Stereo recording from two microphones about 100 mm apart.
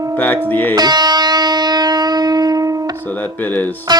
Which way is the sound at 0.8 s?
45° right (ahead or behind).